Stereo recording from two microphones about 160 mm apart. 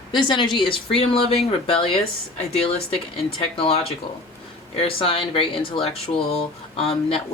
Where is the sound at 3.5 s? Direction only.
35° left (ahead or behind).